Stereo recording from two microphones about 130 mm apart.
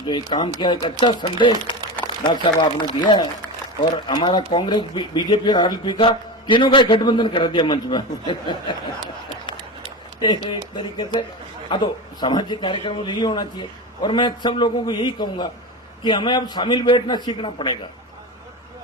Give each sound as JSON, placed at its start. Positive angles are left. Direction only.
{"t": 0.0, "sound": "speech", "side_deg": 35}
{"t": 10.2, "sound": "speech", "side_deg": 35}